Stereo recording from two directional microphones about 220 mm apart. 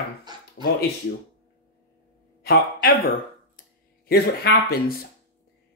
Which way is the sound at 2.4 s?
45° left (ahead or behind).